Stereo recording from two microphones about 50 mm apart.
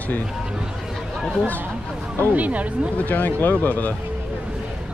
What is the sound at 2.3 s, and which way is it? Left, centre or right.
Speech, right.